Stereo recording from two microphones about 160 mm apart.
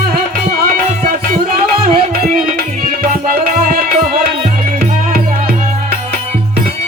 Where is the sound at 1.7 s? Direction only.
35° right (ahead or behind).